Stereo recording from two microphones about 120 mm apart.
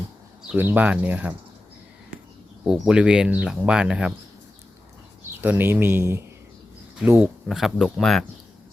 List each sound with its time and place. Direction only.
0.4 s speech: 15° right (ahead or behind)
2.6 s speech: 5° right (ahead or behind)
5.4 s speech: 15° right (ahead or behind)
7.4 s speech: centre (ahead or behind)